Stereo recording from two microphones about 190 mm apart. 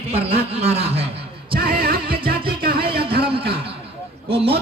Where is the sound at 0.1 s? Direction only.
30° right (ahead or behind).